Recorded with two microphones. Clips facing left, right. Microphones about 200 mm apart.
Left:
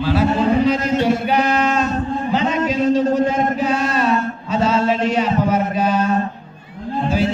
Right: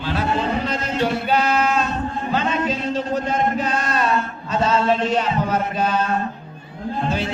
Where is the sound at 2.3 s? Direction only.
15° left (ahead or behind).